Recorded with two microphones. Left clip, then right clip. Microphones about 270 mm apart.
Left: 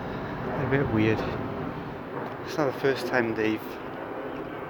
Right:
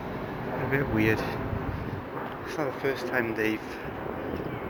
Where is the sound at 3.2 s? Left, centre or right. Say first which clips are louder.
Left 1 dB; left.